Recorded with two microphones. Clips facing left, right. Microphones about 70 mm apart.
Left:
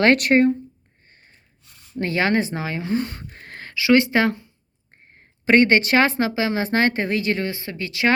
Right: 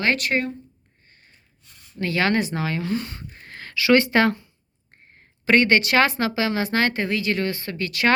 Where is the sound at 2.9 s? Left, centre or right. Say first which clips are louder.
Left 4 dB; left.